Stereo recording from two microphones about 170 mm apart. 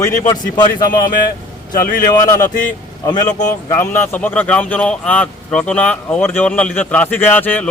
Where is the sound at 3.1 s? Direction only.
25° left (ahead or behind).